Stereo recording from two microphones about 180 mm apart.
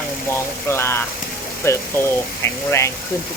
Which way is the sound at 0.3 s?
15° left (ahead or behind).